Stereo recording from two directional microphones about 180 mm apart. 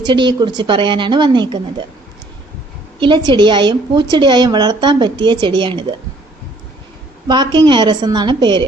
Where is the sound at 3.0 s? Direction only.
25° right (ahead or behind).